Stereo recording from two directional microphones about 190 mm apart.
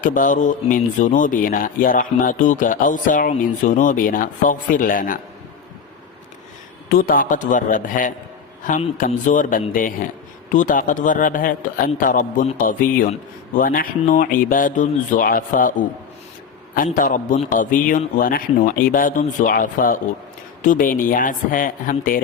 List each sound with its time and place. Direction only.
0.0 s a man's voice: 45° left (ahead or behind)
6.9 s a man's voice: 45° left (ahead or behind)
16.7 s a man's voice: 45° left (ahead or behind)